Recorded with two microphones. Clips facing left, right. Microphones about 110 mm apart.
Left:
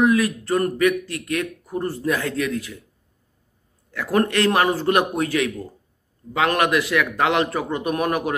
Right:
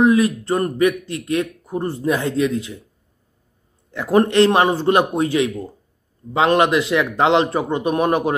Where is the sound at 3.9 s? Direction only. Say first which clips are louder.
Right 5 dB; 25° right (ahead or behind).